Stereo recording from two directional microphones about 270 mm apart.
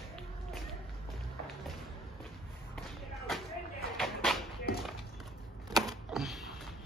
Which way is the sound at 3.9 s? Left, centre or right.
Centre.